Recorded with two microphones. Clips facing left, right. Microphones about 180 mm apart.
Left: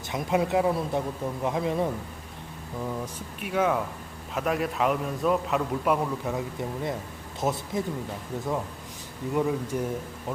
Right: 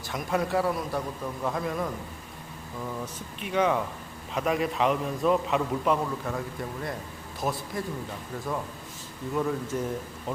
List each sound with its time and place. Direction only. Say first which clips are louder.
0.1 s a man's voice: left 2 dB; 20° left (ahead or behind)
3.0 s a man's voice: left 1 dB; 10° left (ahead or behind)
9.3 s speech: left 2 dB; 10° left (ahead or behind)